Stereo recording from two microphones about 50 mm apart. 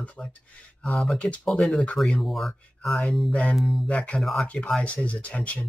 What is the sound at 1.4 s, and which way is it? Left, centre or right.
Speech, centre.